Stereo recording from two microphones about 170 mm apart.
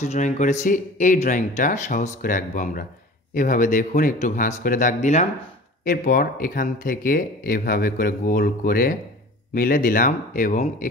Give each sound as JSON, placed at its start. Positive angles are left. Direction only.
{"t": 0.0, "sound": "speech", "side_deg": 40}